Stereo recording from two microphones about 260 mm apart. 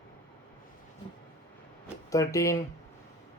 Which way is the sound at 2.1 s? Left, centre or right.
Centre.